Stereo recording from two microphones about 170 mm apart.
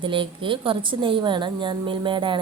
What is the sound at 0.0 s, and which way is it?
A woman's voice, 30° right (ahead or behind).